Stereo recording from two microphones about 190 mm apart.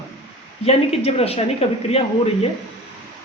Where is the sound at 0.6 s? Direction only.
35° left (ahead or behind).